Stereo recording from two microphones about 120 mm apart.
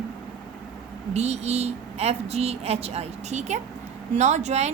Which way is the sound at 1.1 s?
65° right (ahead or behind).